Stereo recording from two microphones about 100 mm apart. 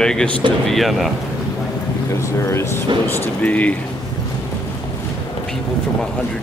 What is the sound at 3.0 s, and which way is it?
Speech, 20° left (ahead or behind).